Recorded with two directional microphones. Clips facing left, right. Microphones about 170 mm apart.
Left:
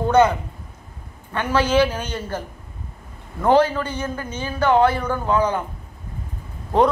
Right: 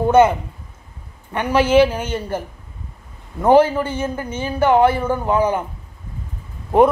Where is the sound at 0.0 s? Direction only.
10° right (ahead or behind).